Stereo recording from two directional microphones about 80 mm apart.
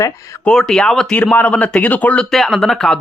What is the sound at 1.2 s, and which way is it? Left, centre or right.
Speech, centre.